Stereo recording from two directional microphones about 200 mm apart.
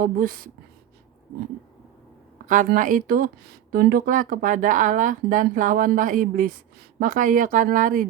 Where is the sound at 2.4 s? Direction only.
40° right (ahead or behind).